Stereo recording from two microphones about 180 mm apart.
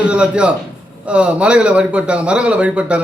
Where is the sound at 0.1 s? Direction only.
5° right (ahead or behind).